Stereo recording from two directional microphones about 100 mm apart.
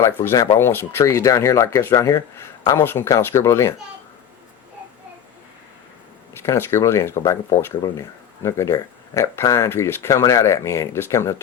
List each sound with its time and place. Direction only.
0.0 s speech: 25° left (ahead or behind)
6.4 s speech: 25° left (ahead or behind)